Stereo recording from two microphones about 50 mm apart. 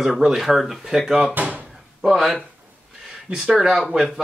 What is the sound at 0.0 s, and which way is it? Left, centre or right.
Speech, centre.